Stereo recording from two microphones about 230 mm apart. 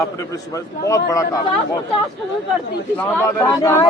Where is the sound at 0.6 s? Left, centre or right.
Centre.